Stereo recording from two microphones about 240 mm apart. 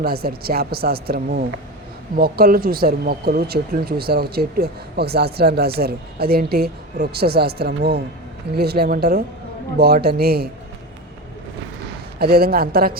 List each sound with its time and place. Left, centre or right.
0.0 s speech: right
12.2 s speech: right